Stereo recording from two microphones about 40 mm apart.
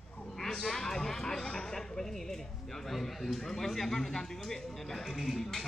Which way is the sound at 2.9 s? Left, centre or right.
Centre.